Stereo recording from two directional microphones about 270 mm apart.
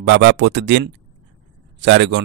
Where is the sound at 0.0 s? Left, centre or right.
Right.